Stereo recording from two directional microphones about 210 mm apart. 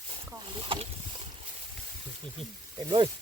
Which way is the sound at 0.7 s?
25° right (ahead or behind).